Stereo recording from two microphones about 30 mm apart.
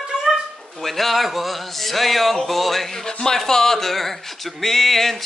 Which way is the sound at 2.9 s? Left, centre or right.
Centre.